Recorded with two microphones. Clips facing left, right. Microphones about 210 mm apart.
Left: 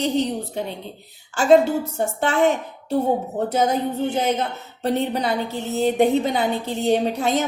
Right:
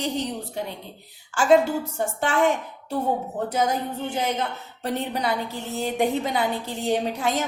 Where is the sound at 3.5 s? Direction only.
25° left (ahead or behind).